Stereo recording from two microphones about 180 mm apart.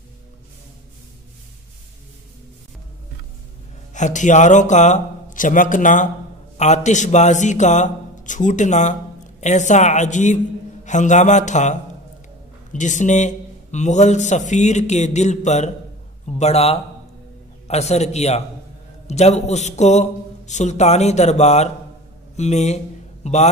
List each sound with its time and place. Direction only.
3.9 s a man's voice: 40° left (ahead or behind)